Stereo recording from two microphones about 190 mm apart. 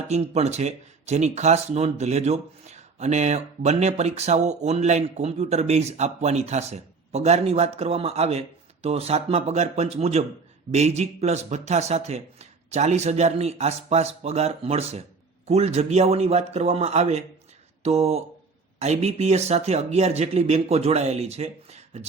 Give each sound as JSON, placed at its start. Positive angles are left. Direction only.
{"t": 0.1, "sound": "speech", "side_deg": -35}